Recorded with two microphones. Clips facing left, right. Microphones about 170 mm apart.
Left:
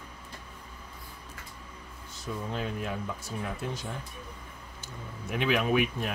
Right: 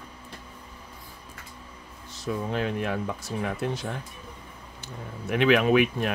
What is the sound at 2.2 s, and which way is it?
Speech, 75° right (ahead or behind).